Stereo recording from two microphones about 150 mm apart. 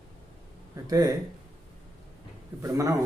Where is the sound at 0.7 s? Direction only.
25° right (ahead or behind).